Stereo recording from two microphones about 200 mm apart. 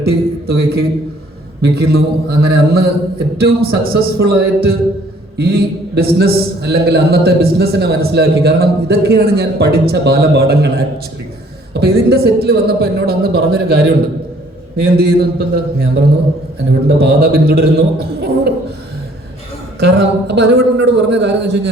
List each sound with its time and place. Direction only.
0.0 s a man's voice: 50° right (ahead or behind)
19.8 s a man's voice: 60° right (ahead or behind)